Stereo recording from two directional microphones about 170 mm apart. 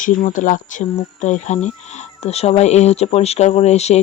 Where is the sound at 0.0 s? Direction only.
50° left (ahead or behind).